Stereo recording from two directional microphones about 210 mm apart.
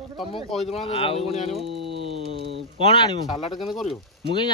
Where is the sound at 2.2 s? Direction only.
55° right (ahead or behind).